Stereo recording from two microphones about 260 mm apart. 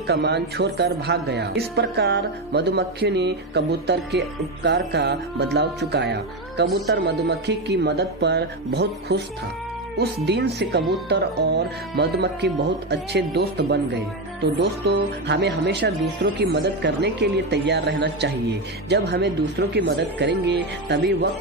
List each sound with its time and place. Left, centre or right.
0.0 s speech: right